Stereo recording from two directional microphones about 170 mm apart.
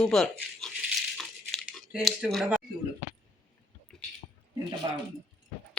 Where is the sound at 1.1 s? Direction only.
Centre (ahead or behind).